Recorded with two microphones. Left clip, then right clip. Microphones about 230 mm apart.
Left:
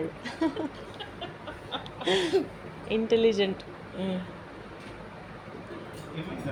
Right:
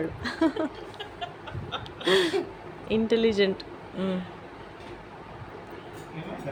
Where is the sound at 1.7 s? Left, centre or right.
Right.